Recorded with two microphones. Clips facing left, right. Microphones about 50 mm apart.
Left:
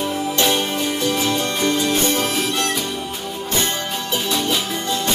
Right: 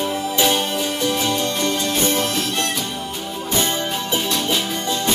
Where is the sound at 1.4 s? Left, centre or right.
Centre.